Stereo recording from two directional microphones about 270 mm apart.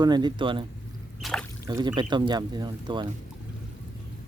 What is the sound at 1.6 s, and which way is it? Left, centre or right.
Speech, centre.